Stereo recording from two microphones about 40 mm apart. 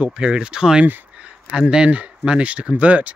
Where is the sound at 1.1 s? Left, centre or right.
Right.